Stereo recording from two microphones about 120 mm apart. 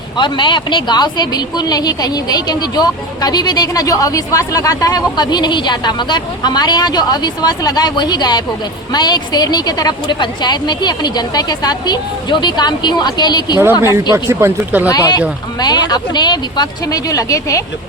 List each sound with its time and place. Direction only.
0.2 s speech: 40° left (ahead or behind)
13.9 s speech: 25° right (ahead or behind)
14.8 s speech: 30° left (ahead or behind)